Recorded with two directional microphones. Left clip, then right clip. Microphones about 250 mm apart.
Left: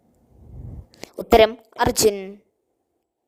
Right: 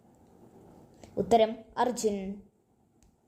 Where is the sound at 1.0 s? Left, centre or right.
Left.